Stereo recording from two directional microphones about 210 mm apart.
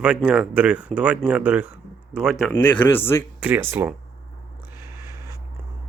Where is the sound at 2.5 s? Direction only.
10° left (ahead or behind).